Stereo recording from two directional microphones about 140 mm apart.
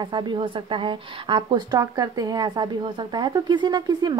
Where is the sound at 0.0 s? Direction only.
35° right (ahead or behind).